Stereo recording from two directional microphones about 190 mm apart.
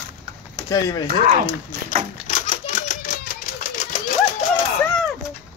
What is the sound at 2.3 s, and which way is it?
Typewriter, 45° left (ahead or behind).